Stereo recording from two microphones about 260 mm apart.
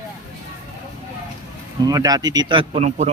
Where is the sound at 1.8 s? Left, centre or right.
Centre.